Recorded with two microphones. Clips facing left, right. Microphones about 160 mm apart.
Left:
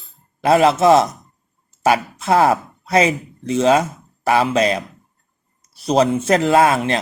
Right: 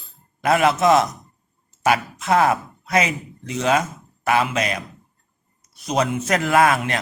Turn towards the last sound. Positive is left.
turn(degrees=25)  # may be behind; listen again after turning